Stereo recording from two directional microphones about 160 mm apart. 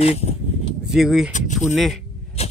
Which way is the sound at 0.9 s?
5° right (ahead or behind).